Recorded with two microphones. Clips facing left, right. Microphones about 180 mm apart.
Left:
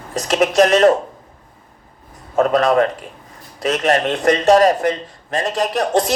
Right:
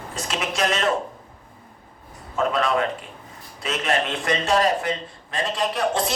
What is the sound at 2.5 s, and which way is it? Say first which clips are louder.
A man's voice: left 9 dB; 45° left (ahead or behind).